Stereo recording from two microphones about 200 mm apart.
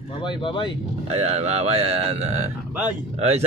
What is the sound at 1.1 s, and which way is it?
A man's voice, 30° right (ahead or behind).